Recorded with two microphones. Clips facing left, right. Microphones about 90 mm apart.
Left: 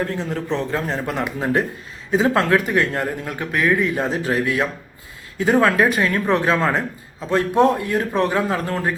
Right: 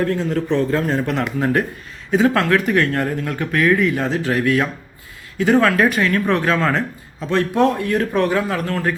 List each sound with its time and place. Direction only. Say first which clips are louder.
0.0 s speech: right 4 dB; 20° left (ahead or behind)